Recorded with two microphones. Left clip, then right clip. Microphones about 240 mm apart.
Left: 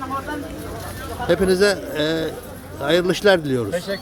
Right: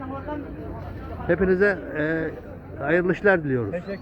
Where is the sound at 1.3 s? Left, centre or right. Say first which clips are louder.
Left 3 dB; centre.